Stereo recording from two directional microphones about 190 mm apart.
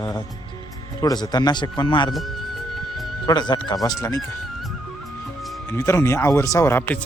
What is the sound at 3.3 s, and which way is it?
Speech, 20° left (ahead or behind).